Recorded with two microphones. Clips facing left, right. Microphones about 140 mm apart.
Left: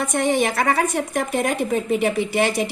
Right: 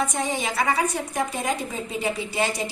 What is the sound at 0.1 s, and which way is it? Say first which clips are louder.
A woman's voice: left 7 dB; 70° left (ahead or behind).